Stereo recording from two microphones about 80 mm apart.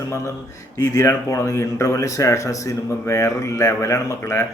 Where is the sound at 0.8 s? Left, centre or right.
Left.